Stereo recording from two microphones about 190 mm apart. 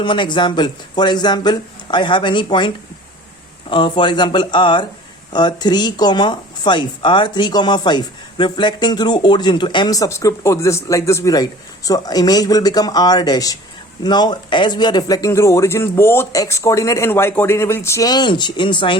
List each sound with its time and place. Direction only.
0.0 s speech: 25° left (ahead or behind)